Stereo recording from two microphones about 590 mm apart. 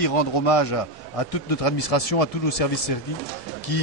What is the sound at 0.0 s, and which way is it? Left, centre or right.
A man's voice, left.